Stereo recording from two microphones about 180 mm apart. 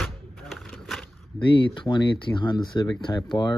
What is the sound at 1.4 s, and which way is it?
Speech, 25° left (ahead or behind).